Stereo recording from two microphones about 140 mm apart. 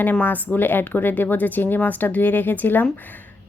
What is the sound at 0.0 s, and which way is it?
Speech, 10° left (ahead or behind).